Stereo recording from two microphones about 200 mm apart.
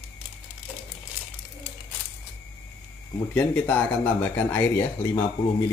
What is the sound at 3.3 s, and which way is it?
Speech, 5° left (ahead or behind).